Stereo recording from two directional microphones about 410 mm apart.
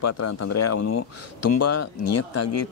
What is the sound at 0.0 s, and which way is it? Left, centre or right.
Speech, left.